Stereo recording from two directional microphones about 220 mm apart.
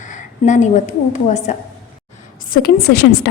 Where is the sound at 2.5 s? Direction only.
45° left (ahead or behind).